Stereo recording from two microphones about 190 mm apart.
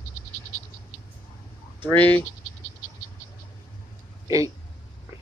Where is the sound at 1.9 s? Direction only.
10° left (ahead or behind).